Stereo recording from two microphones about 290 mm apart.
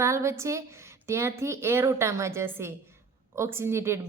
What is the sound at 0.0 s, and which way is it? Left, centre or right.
A woman's voice, centre.